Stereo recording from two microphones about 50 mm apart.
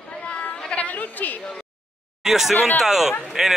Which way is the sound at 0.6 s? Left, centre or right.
Left.